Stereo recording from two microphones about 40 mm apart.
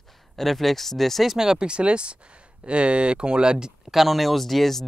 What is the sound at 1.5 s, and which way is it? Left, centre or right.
Speech, right.